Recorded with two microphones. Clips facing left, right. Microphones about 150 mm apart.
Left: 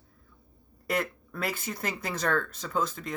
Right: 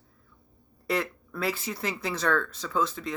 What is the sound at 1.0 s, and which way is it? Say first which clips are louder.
Speech: right 1 dB; 50° left (ahead or behind).